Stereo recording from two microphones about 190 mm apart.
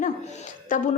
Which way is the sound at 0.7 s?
45° left (ahead or behind).